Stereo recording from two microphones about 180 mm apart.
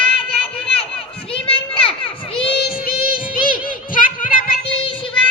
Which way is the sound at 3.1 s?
50° left (ahead or behind).